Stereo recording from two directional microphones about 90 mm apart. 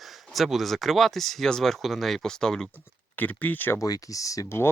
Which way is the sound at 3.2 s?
20° left (ahead or behind).